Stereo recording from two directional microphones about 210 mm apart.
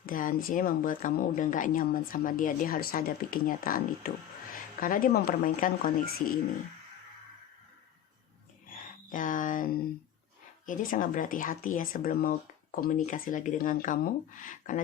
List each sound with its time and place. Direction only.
0.0 s speech: 40° left (ahead or behind)
8.7 s a sound: 40° left (ahead or behind)
10.7 s speech: 40° left (ahead or behind)